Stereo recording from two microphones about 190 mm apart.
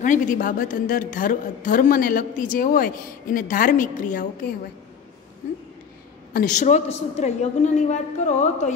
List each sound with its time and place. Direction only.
0.0 s a woman's voice: 45° left (ahead or behind)
6.3 s a woman's voice: 40° left (ahead or behind)